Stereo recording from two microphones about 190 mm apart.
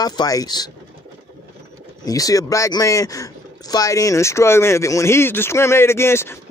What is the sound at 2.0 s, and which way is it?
Speech, 20° left (ahead or behind).